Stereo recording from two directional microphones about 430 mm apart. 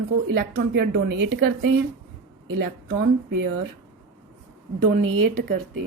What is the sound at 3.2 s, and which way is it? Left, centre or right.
Speech, right.